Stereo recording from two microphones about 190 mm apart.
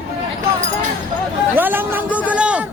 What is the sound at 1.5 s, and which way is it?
A man's voice, 10° right (ahead or behind).